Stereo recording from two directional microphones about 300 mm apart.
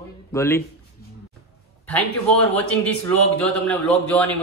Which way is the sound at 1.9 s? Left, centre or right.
Centre.